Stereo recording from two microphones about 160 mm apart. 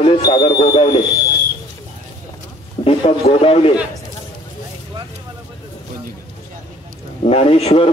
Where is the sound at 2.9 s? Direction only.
35° left (ahead or behind).